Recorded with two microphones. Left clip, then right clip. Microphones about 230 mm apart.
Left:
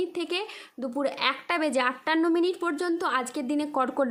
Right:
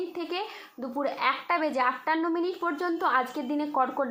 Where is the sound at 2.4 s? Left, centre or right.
Left.